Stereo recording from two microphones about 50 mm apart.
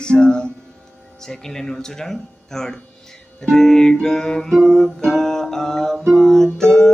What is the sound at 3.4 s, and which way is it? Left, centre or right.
Music, centre.